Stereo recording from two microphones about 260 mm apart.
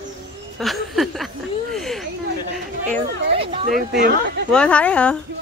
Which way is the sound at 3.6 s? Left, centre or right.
Right.